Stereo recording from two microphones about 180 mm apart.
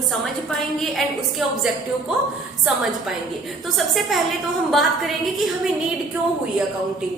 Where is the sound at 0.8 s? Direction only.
Centre (ahead or behind).